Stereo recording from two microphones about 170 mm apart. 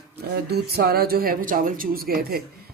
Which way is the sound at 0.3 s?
70° right (ahead or behind).